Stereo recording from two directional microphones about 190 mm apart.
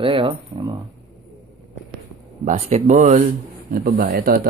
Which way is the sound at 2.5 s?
40° right (ahead or behind).